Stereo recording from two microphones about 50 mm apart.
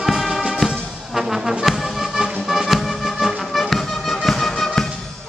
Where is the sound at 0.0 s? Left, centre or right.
Centre.